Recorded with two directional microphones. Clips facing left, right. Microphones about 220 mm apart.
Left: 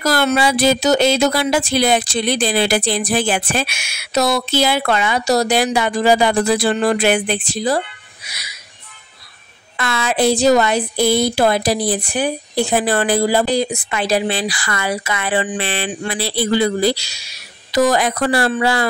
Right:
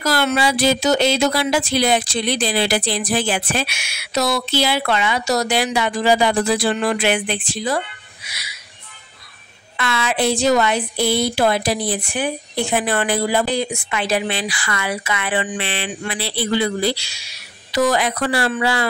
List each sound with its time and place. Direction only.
0.0 s speech: 40° left (ahead or behind)
9.8 s a woman's voice: 45° left (ahead or behind)